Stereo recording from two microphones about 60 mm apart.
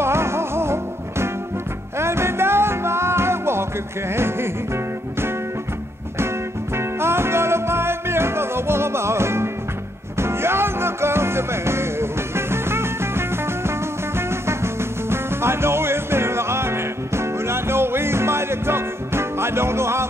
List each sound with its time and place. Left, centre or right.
0.0 s music: right
6.8 s music: right